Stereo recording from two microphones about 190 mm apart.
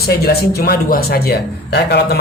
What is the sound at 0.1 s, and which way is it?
Speech, 55° left (ahead or behind).